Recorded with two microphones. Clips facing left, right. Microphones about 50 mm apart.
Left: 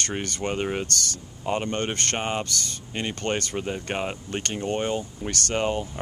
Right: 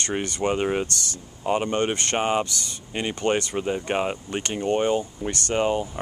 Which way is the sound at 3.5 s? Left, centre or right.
Centre.